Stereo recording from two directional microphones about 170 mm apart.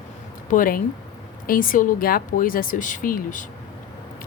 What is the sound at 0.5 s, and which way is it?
A woman's voice, 55° left (ahead or behind).